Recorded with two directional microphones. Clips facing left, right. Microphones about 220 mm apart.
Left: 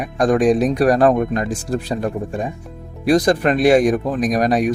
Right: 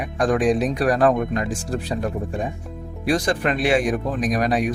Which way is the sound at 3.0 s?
40° left (ahead or behind).